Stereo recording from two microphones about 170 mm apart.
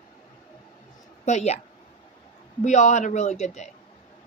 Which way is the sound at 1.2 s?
40° left (ahead or behind).